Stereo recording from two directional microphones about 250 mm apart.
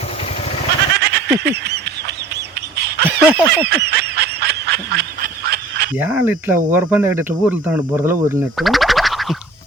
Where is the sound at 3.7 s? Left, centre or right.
Right.